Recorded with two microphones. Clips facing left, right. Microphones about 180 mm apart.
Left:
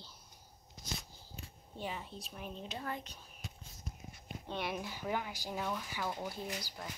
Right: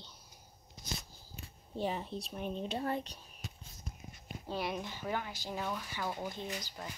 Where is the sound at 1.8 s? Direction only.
35° right (ahead or behind).